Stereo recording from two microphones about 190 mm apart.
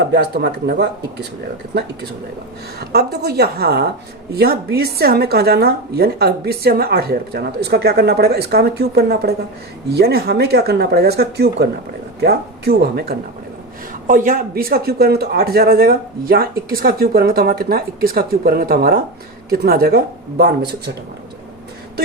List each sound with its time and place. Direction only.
0.1 s speech: 60° right (ahead or behind)
2.7 s speech: 60° right (ahead or behind)